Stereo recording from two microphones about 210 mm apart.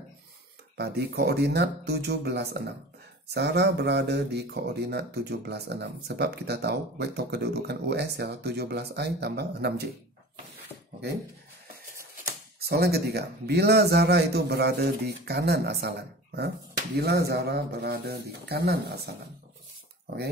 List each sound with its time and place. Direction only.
0.7 s speech: 50° right (ahead or behind)
12.5 s speech: 50° right (ahead or behind)